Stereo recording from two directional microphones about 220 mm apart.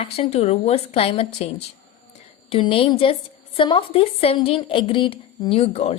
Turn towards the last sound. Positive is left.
turn(degrees=30)  # may be behind; listen again after turning